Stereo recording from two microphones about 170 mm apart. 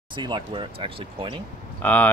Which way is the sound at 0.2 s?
25° right (ahead or behind).